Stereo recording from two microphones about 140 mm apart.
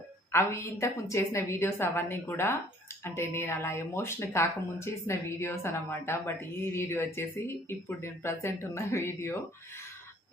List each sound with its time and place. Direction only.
0.3 s speech: 20° left (ahead or behind)